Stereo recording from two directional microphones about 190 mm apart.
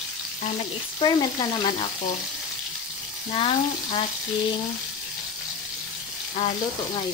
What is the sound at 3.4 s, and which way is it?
Frying, 30° left (ahead or behind).